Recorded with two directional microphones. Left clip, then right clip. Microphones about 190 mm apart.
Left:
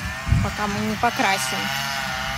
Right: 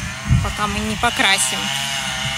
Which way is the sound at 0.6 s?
20° right (ahead or behind).